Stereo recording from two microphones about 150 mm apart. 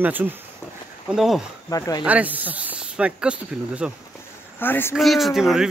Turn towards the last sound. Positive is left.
turn(degrees=-5)  # may be behind; listen again after turning